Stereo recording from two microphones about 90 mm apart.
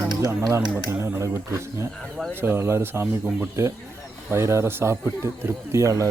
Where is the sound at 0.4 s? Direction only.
35° right (ahead or behind).